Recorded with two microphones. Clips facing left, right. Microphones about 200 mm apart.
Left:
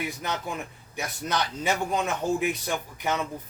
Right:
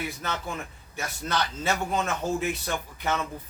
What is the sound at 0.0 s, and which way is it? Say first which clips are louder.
A man's voice: left 1 dB; 15° left (ahead or behind).